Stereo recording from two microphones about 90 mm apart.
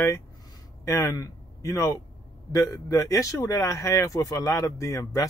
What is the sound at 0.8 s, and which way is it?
A man's voice, 35° left (ahead or behind).